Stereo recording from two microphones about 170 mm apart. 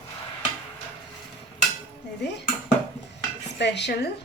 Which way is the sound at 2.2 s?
85° left.